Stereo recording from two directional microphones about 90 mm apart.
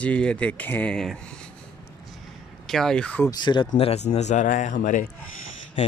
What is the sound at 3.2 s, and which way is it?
Speech, 55° left (ahead or behind).